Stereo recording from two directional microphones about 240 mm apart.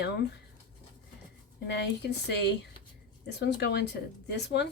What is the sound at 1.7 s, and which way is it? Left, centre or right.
Speech, left.